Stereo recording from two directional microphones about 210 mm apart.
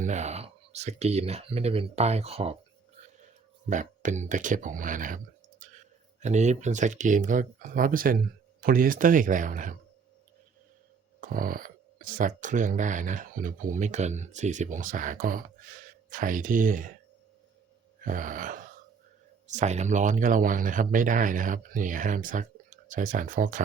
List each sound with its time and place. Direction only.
0.0 s speech: 35° right (ahead or behind)
3.7 s speech: 35° right (ahead or behind)
11.2 s speech: 40° right (ahead or behind)
18.0 s speech: 40° right (ahead or behind)